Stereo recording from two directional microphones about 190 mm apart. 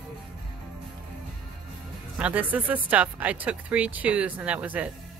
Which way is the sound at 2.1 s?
10° right (ahead or behind).